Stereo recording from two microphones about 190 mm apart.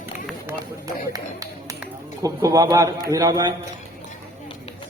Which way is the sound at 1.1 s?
15° right (ahead or behind).